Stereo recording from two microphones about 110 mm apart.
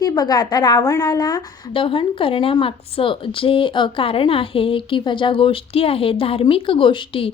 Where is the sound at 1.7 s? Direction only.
55° left (ahead or behind).